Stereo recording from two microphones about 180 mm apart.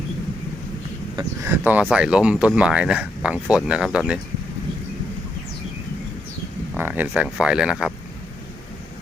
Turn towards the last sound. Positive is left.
turn(degrees=-5)  # may be behind; listen again after turning